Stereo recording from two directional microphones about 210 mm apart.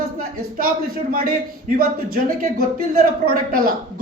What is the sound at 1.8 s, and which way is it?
A man's voice, 45° right (ahead or behind).